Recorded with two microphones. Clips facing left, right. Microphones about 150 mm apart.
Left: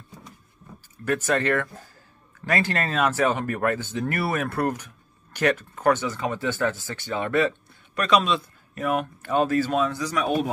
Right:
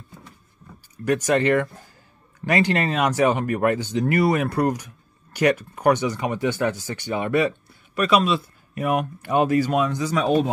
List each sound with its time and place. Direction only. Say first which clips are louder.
1.0 s speech: right 4 dB; 15° right (ahead or behind)
10.0 s speech: right 4 dB; 30° right (ahead or behind)